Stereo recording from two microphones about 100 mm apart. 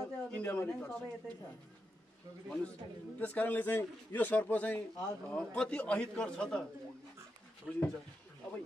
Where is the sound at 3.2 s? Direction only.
15° left (ahead or behind).